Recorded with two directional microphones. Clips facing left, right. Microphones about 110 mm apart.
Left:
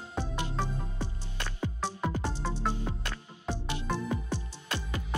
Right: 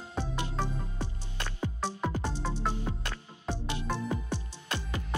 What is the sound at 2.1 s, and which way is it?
Music, 15° right (ahead or behind).